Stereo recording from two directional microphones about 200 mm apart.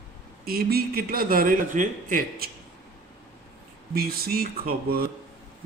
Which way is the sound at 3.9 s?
50° right (ahead or behind).